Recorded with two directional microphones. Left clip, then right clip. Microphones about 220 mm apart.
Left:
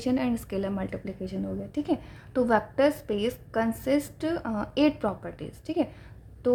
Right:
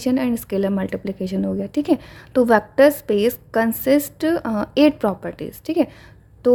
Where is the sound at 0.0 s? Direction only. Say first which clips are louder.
Right 7 dB; 35° right (ahead or behind).